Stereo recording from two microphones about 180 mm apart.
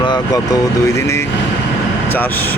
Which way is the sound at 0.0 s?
20° left (ahead or behind).